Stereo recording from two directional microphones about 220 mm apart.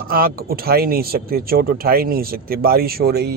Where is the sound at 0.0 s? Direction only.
40° right (ahead or behind).